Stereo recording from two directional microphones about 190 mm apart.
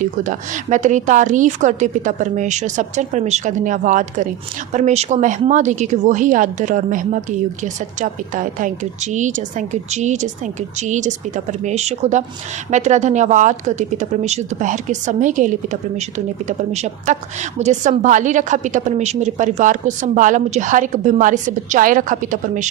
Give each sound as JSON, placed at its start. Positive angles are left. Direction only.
{"t": 0.0, "sound": "speech", "side_deg": -40}